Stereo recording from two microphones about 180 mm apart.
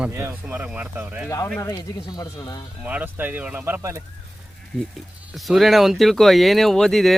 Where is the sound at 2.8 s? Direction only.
10° right (ahead or behind).